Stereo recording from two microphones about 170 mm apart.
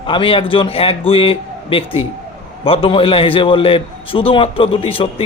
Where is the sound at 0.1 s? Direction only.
30° left (ahead or behind).